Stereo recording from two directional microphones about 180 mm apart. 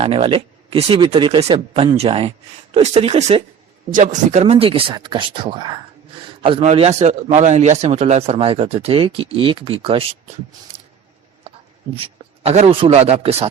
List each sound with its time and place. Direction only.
0.0 s a man's voice: 30° right (ahead or behind)
10.7 s a sound: 30° right (ahead or behind)
11.9 s a man's voice: 30° right (ahead or behind)